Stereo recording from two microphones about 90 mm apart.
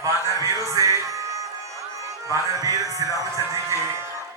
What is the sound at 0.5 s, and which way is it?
Music, 35° right (ahead or behind).